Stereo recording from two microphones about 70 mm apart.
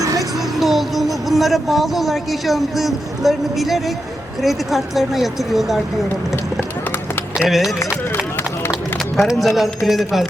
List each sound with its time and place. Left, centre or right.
0.0 s music: right
0.3 s speech: centre
7.3 s speech: centre
9.2 s speech: centre